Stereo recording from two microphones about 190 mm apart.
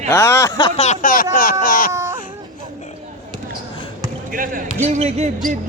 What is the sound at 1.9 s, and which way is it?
Baby cry, 15° right (ahead or behind).